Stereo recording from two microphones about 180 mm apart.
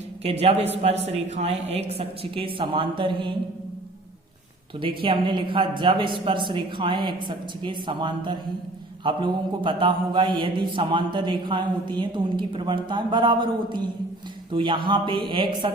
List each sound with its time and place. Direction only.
0.2 s speech: 35° right (ahead or behind)
4.8 s a man's voice: 30° right (ahead or behind)